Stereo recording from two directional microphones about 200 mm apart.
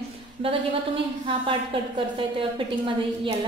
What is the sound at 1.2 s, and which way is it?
A woman's voice, 25° right (ahead or behind).